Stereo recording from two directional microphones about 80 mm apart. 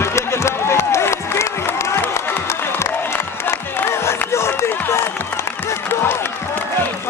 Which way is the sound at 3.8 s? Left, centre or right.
Left.